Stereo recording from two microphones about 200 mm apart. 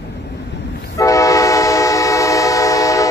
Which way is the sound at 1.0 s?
15° left (ahead or behind).